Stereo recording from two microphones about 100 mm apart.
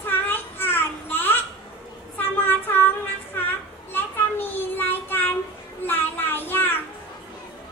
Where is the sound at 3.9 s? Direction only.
20° left (ahead or behind).